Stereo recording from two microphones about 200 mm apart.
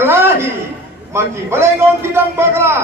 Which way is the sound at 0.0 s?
10° right (ahead or behind).